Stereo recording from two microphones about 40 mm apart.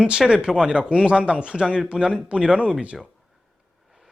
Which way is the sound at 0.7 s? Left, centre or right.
Right.